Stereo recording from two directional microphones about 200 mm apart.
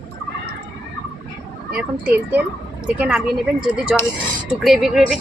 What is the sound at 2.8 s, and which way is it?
Speech, 5° right (ahead or behind).